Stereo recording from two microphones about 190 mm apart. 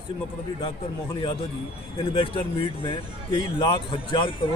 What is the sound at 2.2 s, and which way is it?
A man's voice, 30° left (ahead or behind).